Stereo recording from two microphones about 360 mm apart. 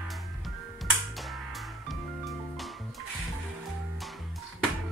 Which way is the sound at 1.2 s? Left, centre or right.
Centre.